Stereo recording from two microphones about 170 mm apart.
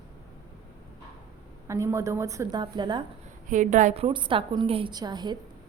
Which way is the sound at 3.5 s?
45° right (ahead or behind).